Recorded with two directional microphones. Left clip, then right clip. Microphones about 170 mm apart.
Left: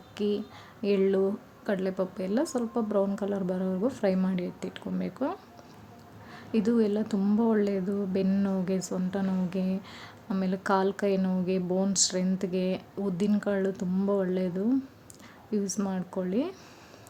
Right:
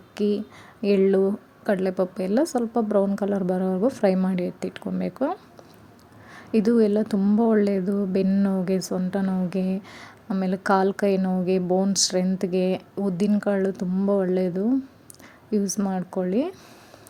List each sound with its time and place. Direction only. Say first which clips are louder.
0.2 s speech: right 5 dB; 30° right (ahead or behind)